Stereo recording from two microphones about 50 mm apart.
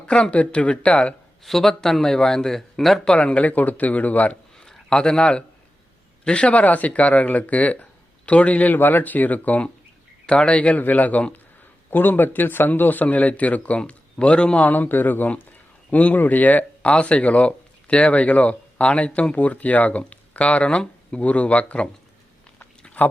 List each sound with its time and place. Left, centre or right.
0.0 s speech: left
1.5 s speech: centre
3.0 s speech: left
4.6 s a sound: centre
6.2 s speech: left
11.9 s speech: left
14.6 s speech: left
22.5 s a sound: centre